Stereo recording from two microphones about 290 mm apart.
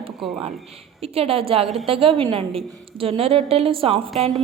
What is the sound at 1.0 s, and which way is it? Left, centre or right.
A woman's voice, centre.